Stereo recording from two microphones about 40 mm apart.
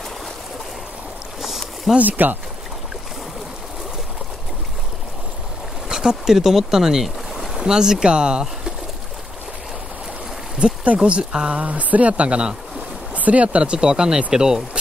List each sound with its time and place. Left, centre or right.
1.4 s rowboat: centre
2.0 s speech: right
5.9 s boat: centre
7.6 s speech: centre
10.6 s speech: right
13.1 s speech: right
13.6 s speech: right